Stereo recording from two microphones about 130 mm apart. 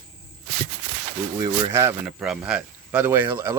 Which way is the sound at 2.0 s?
5° right (ahead or behind).